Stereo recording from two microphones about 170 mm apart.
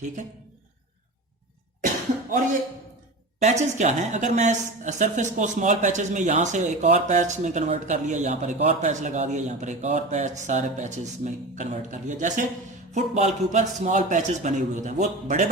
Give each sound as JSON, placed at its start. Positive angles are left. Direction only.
{"t": 3.4, "sound": "speech", "side_deg": -45}